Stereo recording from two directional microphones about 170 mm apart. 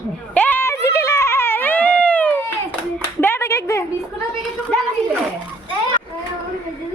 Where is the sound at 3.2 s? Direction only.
15° left (ahead or behind).